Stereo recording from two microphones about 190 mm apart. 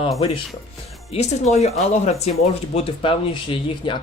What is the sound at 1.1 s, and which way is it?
Speech, 35° left (ahead or behind).